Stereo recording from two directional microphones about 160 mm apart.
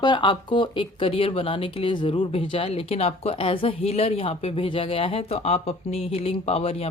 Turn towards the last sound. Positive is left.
turn(degrees=40)  # may be behind; listen again after turning